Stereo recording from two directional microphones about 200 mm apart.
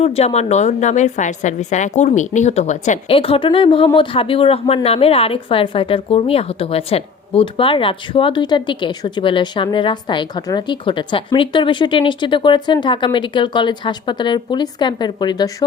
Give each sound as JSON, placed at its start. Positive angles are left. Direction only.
{"t": 0.0, "sound": "a woman's voice", "side_deg": 30}